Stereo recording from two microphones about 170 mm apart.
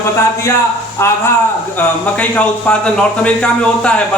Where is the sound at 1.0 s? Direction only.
15° left (ahead or behind).